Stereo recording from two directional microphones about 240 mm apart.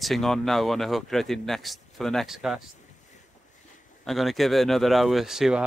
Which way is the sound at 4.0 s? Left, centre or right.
Centre.